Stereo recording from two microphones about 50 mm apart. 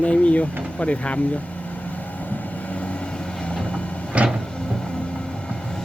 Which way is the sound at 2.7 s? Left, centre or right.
Left.